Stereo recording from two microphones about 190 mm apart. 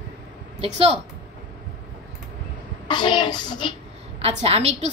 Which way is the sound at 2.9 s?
25° left (ahead or behind).